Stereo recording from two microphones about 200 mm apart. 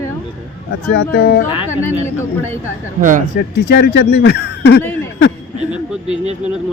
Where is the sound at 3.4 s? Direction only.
55° left (ahead or behind).